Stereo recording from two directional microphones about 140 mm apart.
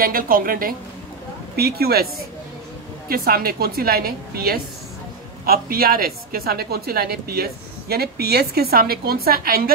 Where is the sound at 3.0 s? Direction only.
90° right.